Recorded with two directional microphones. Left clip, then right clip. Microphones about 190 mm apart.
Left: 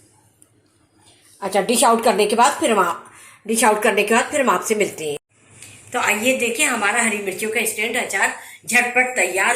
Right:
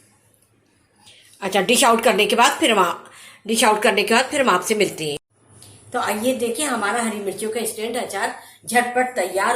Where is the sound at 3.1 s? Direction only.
Centre (ahead or behind).